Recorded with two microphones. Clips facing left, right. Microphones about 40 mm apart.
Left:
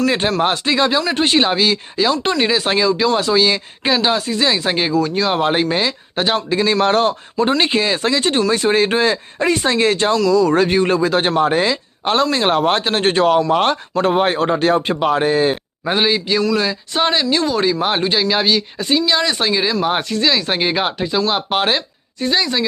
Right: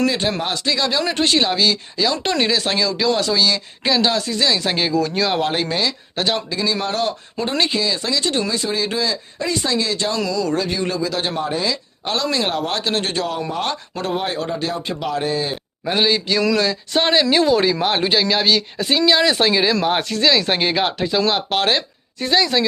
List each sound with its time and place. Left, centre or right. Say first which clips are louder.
0.0 s speech: left 4 dB; left; by 5.4 s centre
5.4 s speech: left 4 dB; left
6.5 s speech: left 7 dB; left
7.0 s speech: left 5 dB; left
7.6 s speech: left 4 dB; left
11.7 s speech: left 5 dB; left
13.5 s a man's voice: left 8 dB; left
16.0 s speech: left 1 dB; centre